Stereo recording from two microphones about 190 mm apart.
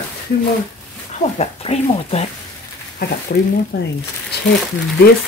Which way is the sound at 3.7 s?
60° left (ahead or behind).